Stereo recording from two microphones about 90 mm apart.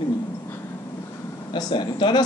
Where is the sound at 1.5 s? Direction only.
60° left (ahead or behind).